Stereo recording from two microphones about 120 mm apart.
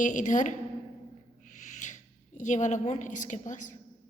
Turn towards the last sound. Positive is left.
turn(degrees=90)